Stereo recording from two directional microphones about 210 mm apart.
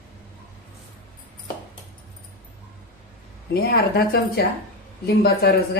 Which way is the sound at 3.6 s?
45° left (ahead or behind).